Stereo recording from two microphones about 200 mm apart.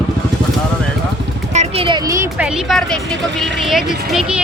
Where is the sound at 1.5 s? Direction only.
30° right (ahead or behind).